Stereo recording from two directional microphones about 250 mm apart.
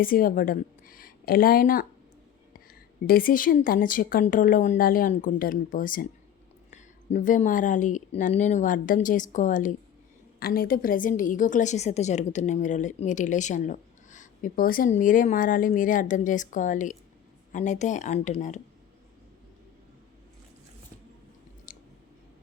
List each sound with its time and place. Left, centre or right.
0.0 s a woman's voice: left
3.1 s a woman's voice: left
21.7 s a sound: left